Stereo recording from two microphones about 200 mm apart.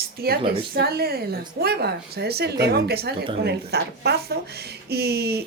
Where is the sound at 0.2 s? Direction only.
50° right (ahead or behind).